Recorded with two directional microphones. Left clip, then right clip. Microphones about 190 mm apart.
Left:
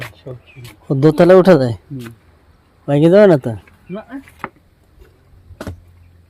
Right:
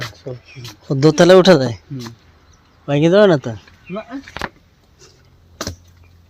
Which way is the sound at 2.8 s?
30° left (ahead or behind).